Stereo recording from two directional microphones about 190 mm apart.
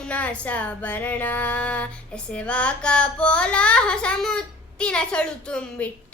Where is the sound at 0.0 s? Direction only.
5° left (ahead or behind).